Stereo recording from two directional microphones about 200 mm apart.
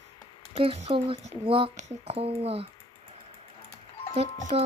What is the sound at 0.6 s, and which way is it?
Speech, 30° right (ahead or behind).